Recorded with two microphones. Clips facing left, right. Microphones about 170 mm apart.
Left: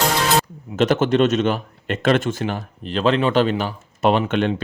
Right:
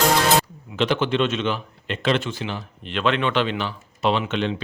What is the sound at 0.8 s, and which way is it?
A man's voice, 45° left (ahead or behind).